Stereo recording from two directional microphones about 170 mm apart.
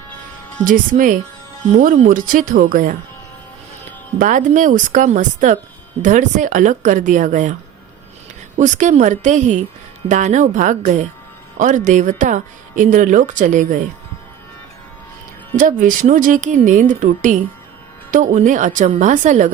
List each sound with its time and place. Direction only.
0.6 s speech: 50° right (ahead or behind)
4.2 s speech: 50° right (ahead or behind)
8.5 s speech: 45° right (ahead or behind)
15.5 s speech: 50° right (ahead or behind)